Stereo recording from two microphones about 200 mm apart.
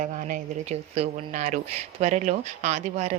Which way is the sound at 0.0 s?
40° right (ahead or behind).